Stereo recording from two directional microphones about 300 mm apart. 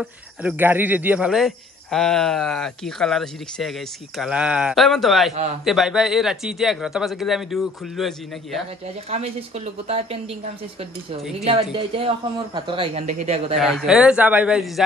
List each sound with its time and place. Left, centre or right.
0.0 s speech: centre
8.8 s speech: centre
13.6 s speech: centre